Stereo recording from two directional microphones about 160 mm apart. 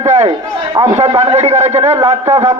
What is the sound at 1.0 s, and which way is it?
A man's voice, 40° right (ahead or behind).